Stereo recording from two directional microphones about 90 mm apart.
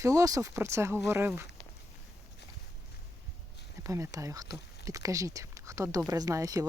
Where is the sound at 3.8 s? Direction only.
35° right (ahead or behind).